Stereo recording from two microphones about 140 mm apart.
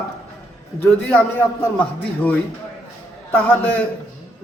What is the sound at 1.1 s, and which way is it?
Speech, 15° left (ahead or behind).